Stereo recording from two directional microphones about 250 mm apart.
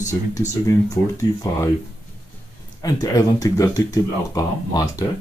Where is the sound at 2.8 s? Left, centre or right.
Centre.